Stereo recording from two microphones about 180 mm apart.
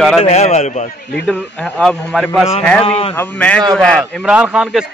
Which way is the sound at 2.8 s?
35° left (ahead or behind).